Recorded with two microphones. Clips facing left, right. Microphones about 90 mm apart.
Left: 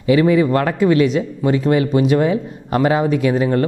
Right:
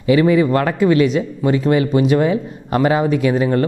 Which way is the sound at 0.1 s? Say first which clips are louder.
Even; 15° right (ahead or behind).